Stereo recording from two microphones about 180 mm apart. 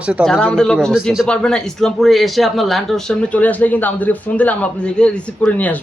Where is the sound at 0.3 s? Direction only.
5° left (ahead or behind).